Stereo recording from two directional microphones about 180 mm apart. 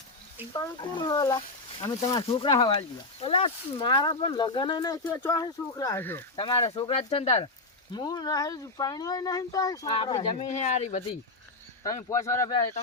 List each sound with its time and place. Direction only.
0.5 s speech: 25° left (ahead or behind)
6.3 s speech: 25° left (ahead or behind)
9.9 s speech: 30° left (ahead or behind)
11.8 s speech: 20° left (ahead or behind)